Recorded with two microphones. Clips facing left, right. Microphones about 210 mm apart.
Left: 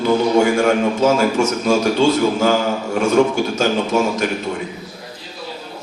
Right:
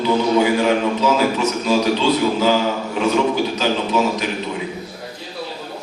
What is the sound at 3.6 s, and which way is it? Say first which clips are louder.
Speech: left 2 dB; 45° left (ahead or behind).